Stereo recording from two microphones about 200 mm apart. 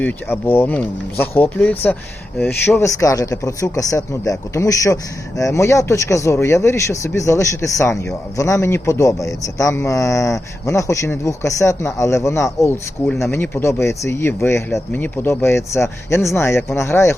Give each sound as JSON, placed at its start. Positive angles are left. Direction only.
{"t": 0.0, "sound": "a man's voice", "side_deg": 10}